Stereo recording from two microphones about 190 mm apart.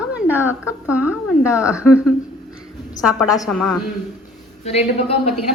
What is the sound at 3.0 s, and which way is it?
Speech, 5° right (ahead or behind).